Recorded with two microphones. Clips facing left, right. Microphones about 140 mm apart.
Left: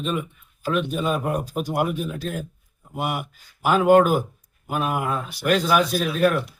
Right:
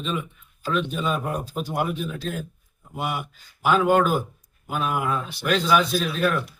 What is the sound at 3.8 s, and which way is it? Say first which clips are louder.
Speech: left 6 dB; 45° left (ahead or behind).